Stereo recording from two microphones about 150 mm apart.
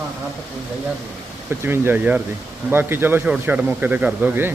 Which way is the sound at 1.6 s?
15° right (ahead or behind).